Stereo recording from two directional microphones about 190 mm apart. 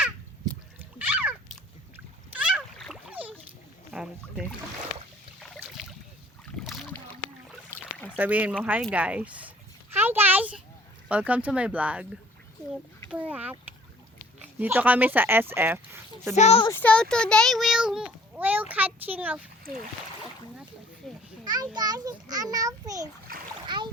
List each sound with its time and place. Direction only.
0.9 s a sound: 10° right (ahead or behind)
2.3 s boat: 5° right (ahead or behind)
3.9 s speech: 5° right (ahead or behind)
6.6 s boat: centre (ahead or behind)
7.7 s rowboat: 15° right (ahead or behind)
8.1 s speech: 10° right (ahead or behind)
9.9 s a sound: 10° right (ahead or behind)
11.1 s speech: 5° right (ahead or behind)
13.1 s speech: 10° right (ahead or behind)
16.3 s speech: 35° left (ahead or behind)
16.6 s a child's voice: 10° left (ahead or behind); by 19.5 s 10° right (ahead or behind)
21.4 s a child's voice: 20° right (ahead or behind)
23.3 s splash: 50° right (ahead or behind)
23.6 s splash: 25° right (ahead or behind)